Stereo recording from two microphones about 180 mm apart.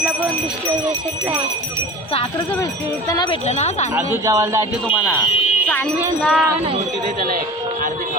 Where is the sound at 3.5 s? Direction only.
40° left (ahead or behind).